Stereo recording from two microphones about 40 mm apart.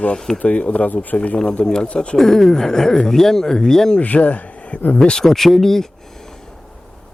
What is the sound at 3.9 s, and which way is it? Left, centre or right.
Speech, left.